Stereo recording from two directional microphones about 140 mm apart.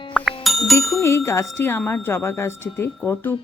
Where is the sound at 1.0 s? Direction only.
20° left (ahead or behind).